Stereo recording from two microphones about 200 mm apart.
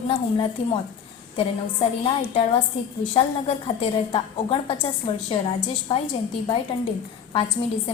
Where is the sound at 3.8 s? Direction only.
25° left (ahead or behind).